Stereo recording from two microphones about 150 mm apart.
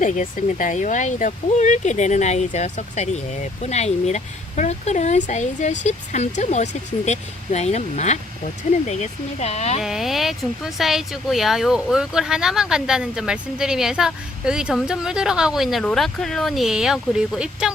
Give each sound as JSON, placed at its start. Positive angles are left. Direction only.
{"t": 0.0, "sound": "speech", "side_deg": 60}
{"t": 9.8, "sound": "speech", "side_deg": 0}